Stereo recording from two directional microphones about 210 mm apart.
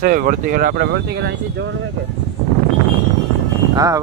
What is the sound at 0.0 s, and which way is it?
Speech, 40° right (ahead or behind).